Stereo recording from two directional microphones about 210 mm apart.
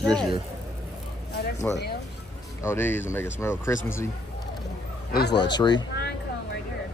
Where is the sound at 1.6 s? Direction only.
10° left (ahead or behind).